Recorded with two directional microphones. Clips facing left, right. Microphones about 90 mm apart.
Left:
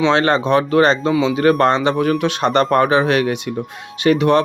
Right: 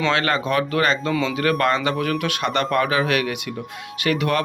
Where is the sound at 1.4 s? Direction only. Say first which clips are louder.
Left 6 dB; 30° left (ahead or behind).